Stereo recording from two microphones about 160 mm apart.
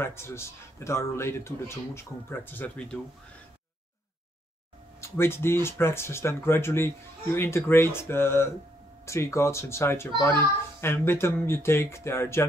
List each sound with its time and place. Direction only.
0.0 s a child's voice: 15° left (ahead or behind)
5.0 s a child's voice: 15° left (ahead or behind)